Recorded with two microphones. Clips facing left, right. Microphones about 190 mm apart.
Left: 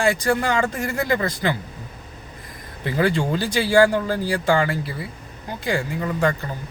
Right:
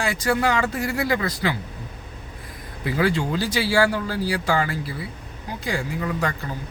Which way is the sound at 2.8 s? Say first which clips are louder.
Left 1 dB; 5° right (ahead or behind).